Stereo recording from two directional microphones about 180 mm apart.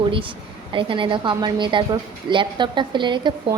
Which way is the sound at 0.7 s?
30° right (ahead or behind).